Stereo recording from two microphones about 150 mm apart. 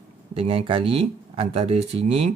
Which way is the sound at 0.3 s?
40° right (ahead or behind).